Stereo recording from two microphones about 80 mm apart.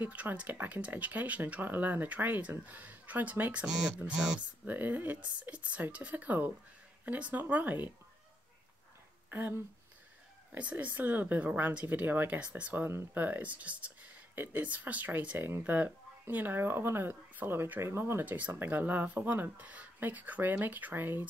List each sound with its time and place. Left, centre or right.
0.0 s speech: right
4.6 s speech: right
9.3 s speech: right
18.2 s speech: right